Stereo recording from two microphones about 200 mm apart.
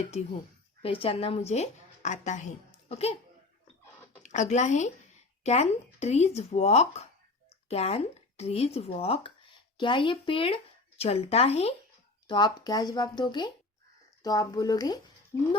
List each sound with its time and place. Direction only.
0.8 s a woman's voice: 25° left (ahead or behind)
4.2 s speech: 35° left (ahead or behind); by 15.0 s 20° left (ahead or behind)